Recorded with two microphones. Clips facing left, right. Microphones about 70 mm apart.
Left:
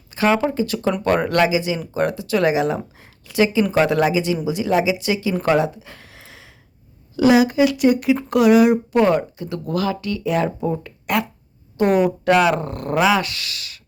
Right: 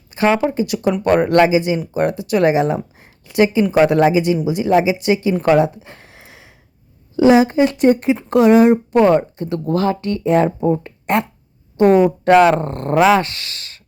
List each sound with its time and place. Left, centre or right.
0.1 s a sound: right
0.5 s speech: centre
12.2 s speech: right